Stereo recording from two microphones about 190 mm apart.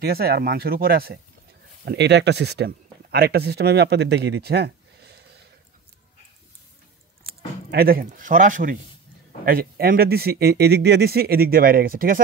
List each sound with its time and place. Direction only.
0.0 s speech: 55° right (ahead or behind)
7.7 s speech: 55° right (ahead or behind)